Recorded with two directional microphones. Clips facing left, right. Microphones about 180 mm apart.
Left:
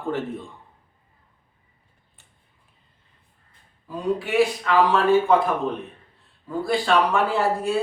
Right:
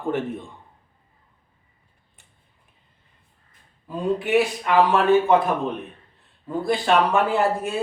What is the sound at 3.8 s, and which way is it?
Speech, 20° right (ahead or behind).